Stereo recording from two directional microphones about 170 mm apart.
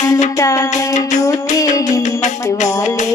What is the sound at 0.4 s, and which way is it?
Music, 20° left (ahead or behind).